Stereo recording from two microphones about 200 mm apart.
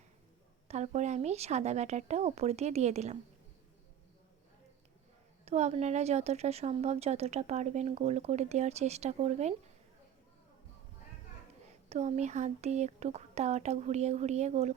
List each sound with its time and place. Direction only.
0.7 s a woman's voice: 35° right (ahead or behind)
5.5 s a woman's voice: 35° right (ahead or behind)
11.7 s a woman's voice: 35° right (ahead or behind)